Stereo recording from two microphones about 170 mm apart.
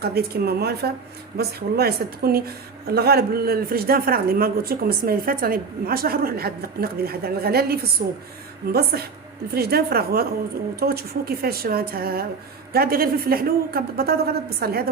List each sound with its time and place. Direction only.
0.0 s a woman's voice: 65° right (ahead or behind)
8.0 s a woman's voice: 55° right (ahead or behind)
8.7 s a woman's voice: 70° right (ahead or behind)